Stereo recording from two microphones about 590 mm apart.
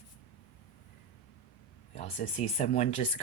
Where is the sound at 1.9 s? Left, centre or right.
Centre.